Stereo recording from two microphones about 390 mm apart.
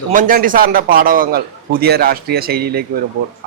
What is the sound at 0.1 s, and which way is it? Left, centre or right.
A man's voice, right.